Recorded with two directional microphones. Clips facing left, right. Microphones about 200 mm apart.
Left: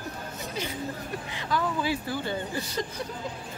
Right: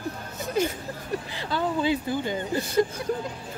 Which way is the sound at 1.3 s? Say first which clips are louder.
Right 1 dB; 25° right (ahead or behind).